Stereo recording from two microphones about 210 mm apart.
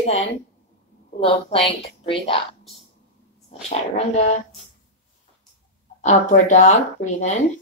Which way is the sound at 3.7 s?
30° left (ahead or behind).